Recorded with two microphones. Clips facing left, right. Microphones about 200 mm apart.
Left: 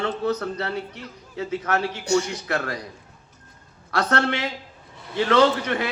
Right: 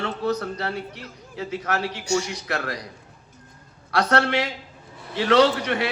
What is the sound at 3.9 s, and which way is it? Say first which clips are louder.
Speech: right 2 dB; 50° left (ahead or behind).